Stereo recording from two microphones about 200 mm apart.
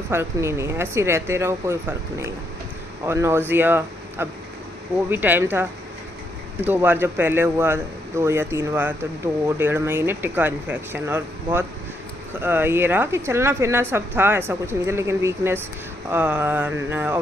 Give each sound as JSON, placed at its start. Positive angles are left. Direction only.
{"t": 0.1, "sound": "a woman's voice", "side_deg": -15}